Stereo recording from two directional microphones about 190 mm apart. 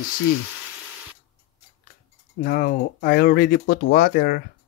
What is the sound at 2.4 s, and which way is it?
Speech, 50° left (ahead or behind).